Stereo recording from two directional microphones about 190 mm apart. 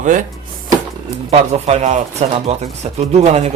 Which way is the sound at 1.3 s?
35° right (ahead or behind).